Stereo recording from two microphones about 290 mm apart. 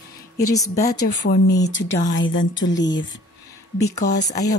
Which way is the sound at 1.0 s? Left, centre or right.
Left.